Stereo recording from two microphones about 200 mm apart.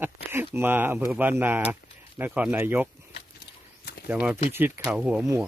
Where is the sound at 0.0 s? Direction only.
10° right (ahead or behind).